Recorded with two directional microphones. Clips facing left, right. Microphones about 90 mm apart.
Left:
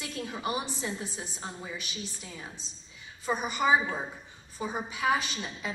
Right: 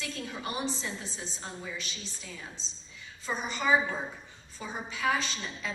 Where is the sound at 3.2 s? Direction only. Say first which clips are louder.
Left 3 dB; 15° left (ahead or behind).